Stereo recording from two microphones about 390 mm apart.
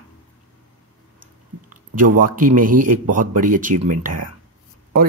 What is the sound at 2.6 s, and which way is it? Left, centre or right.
Speech, right.